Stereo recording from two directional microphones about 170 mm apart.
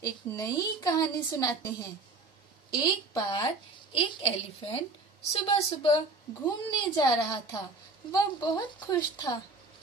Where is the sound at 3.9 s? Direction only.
35° left (ahead or behind).